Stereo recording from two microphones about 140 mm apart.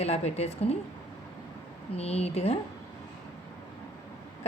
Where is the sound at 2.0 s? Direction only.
50° left (ahead or behind).